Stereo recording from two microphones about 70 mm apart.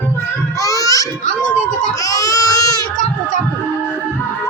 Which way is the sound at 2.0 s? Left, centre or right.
Left.